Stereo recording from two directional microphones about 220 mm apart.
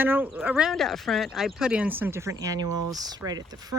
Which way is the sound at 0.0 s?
10° right (ahead or behind).